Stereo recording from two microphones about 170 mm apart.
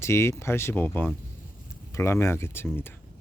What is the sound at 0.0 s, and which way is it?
Speech, 15° left (ahead or behind).